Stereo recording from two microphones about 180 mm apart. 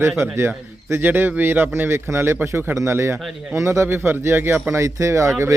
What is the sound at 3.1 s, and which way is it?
Speech, centre (ahead or behind).